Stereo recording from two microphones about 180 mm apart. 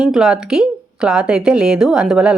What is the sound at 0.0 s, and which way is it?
Speech, 5° right (ahead or behind).